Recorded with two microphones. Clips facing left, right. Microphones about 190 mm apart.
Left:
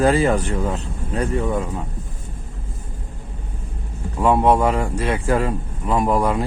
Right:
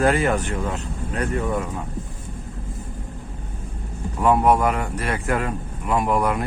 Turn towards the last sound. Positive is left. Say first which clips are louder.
# left 2 dB
turn(degrees=30)  # may be behind; listen again after turning